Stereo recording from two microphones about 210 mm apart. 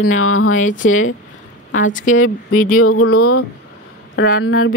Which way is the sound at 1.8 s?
35° left (ahead or behind).